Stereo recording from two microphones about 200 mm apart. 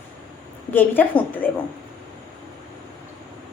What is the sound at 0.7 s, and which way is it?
Speech, 10° left (ahead or behind).